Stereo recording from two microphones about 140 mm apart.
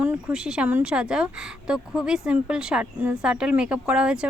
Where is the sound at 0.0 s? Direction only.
15° right (ahead or behind).